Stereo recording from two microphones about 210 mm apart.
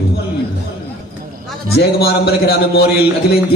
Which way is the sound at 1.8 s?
50° left (ahead or behind).